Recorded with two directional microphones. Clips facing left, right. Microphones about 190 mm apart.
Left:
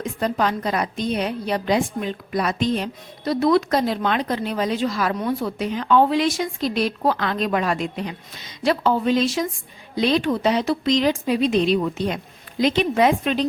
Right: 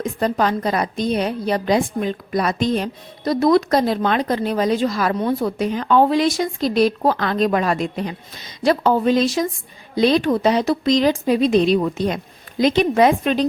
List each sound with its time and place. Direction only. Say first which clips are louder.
0.0 s a woman's voice: right 3 dB; 40° right (ahead or behind)